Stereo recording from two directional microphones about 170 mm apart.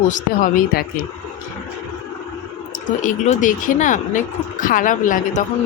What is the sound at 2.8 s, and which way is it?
Speech, 50° left (ahead or behind).